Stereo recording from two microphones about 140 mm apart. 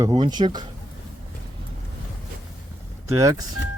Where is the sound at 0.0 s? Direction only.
30° right (ahead or behind).